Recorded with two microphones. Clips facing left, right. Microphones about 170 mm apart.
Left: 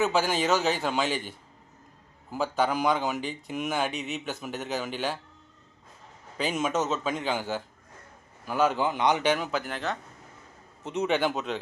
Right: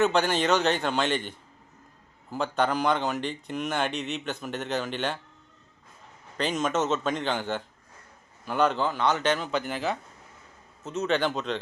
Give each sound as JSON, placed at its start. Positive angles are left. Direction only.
{"t": 0.0, "sound": "speech", "side_deg": 5}
{"t": 2.3, "sound": "speech", "side_deg": 5}
{"t": 6.3, "sound": "a man's voice", "side_deg": 5}
{"t": 10.8, "sound": "a man's voice", "side_deg": 15}